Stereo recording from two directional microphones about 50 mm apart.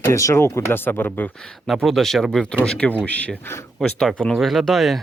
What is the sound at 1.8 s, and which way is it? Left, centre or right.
Speech, centre.